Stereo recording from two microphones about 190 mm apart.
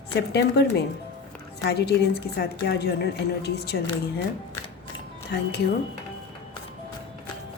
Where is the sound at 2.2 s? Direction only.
60° left (ahead or behind).